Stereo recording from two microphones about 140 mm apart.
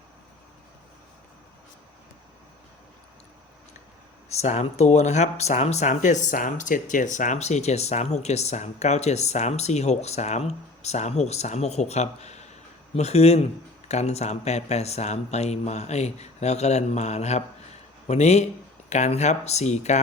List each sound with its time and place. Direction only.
4.4 s speech: 55° left (ahead or behind)